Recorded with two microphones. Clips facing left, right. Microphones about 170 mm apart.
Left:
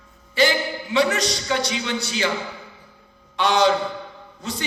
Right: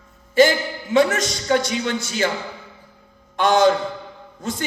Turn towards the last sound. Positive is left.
turn(degrees=-50)  # may be behind; listen again after turning